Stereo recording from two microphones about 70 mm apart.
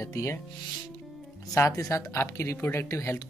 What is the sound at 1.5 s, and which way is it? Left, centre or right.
Speech, left.